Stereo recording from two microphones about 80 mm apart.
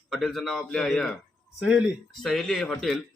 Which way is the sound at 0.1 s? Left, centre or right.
Centre.